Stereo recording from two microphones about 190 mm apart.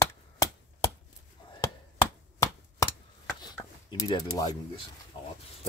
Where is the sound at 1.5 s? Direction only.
15° left (ahead or behind).